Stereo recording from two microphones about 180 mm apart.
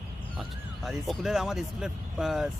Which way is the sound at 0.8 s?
Centre (ahead or behind).